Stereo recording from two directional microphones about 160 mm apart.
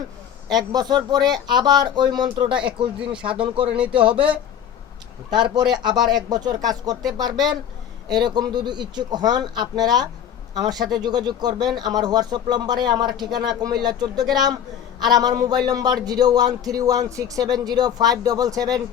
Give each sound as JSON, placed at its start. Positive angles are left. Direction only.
{"t": 0.5, "sound": "speech", "side_deg": -25}